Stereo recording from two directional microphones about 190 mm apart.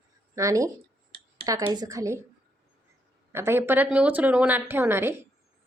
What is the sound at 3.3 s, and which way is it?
A woman's voice, 10° right (ahead or behind).